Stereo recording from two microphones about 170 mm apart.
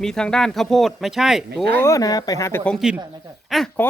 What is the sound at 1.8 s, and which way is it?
Speech, 20° left (ahead or behind).